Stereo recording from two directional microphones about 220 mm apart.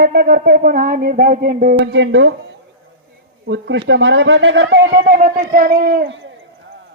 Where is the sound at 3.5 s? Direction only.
50° right (ahead or behind).